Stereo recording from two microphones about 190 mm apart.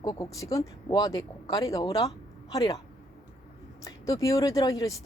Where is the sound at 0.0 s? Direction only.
20° left (ahead or behind).